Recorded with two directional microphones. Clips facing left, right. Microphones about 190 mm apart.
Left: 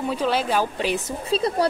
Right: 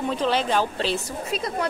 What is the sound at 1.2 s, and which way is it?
Speech, 30° left (ahead or behind).